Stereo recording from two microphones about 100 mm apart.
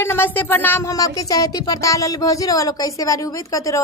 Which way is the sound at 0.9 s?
35° left (ahead or behind).